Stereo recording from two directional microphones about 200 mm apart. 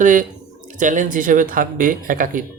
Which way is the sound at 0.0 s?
40° right (ahead or behind).